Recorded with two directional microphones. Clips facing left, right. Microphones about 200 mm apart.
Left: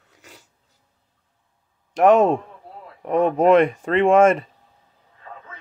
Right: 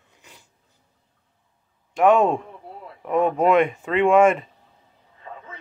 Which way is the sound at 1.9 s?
35° left (ahead or behind).